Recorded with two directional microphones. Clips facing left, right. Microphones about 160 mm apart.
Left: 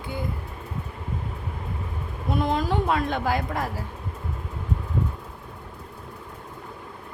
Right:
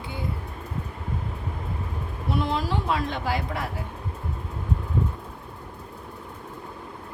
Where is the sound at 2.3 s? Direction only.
45° left (ahead or behind).